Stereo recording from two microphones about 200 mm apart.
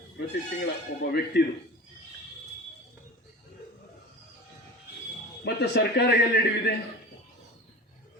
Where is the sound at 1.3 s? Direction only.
60° left (ahead or behind).